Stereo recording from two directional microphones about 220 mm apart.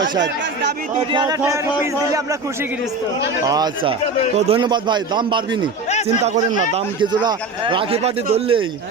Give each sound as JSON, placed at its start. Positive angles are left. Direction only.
{"t": 0.9, "sound": "a man's voice", "side_deg": -20}
{"t": 3.4, "sound": "a man's voice", "side_deg": -20}
{"t": 6.2, "sound": "a man's voice", "side_deg": -35}
{"t": 6.7, "sound": "a man's voice", "side_deg": -20}